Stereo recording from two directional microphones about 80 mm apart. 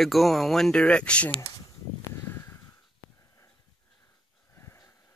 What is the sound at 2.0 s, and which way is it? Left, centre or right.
Crow, left.